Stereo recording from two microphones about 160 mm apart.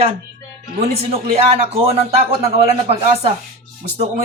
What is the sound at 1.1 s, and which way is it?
A man's voice, 40° right (ahead or behind).